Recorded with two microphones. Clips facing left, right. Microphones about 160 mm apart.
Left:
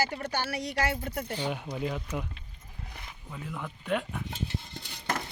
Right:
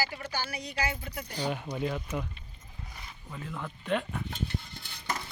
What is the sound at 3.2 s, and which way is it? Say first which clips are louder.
Speech: even; 5° left (ahead or behind).